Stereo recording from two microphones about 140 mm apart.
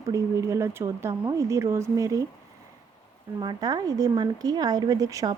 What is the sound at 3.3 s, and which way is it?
A woman's voice, 30° right (ahead or behind).